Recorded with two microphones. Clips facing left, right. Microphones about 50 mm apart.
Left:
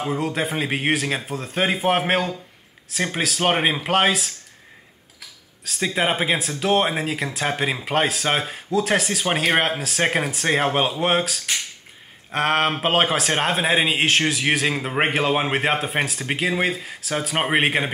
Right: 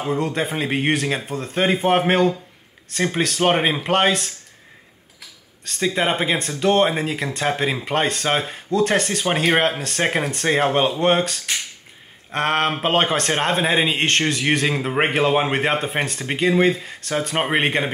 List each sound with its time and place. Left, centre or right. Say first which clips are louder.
0.0 s speech: right 1 dB; centre
5.7 s speech: right 1 dB; centre